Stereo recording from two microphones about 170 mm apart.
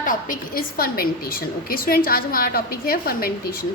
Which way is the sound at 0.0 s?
55° left (ahead or behind).